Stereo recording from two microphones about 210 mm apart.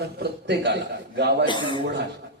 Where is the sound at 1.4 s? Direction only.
20° left (ahead or behind).